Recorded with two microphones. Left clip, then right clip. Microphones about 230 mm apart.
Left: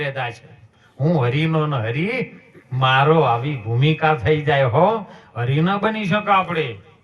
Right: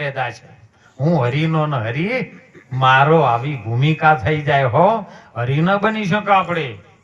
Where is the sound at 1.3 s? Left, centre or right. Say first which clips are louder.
Right 1 dB; right.